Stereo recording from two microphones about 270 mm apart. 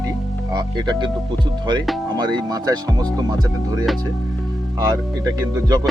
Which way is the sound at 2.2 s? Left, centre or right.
Centre.